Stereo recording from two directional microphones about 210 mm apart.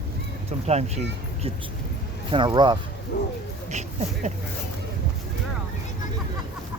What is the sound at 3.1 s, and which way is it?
Speech, 45° left (ahead or behind).